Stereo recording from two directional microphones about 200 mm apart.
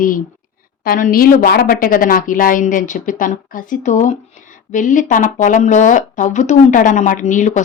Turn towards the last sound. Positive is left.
turn(degrees=35)  # may be behind; listen again after turning